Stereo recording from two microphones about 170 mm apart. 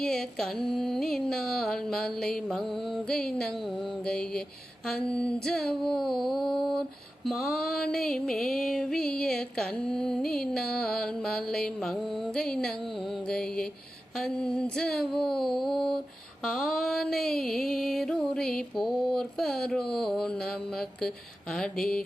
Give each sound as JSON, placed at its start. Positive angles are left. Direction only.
{"t": 0.0, "sound": "music", "side_deg": 5}